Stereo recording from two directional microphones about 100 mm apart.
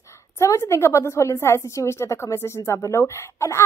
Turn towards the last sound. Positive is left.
turn(degrees=25)  # may be behind; listen again after turning